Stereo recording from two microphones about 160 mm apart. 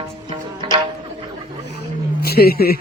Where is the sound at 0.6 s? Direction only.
30° right (ahead or behind).